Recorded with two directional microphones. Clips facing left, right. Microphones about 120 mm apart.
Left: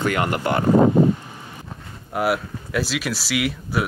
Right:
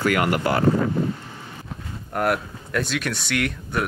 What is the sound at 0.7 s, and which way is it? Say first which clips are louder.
Speech: left 8 dB; 60° left (ahead or behind).